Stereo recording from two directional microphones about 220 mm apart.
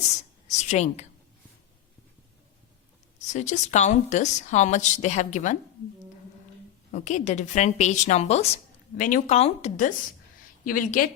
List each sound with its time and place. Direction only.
0.4 s a sound: 30° left (ahead or behind)
3.3 s a woman's voice: 30° left (ahead or behind)
6.9 s a woman's voice: 35° left (ahead or behind)